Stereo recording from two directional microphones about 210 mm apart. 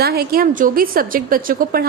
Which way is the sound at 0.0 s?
50° right (ahead or behind).